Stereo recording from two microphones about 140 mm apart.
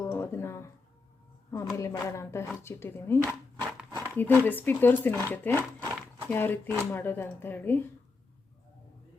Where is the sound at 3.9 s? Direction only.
25° right (ahead or behind).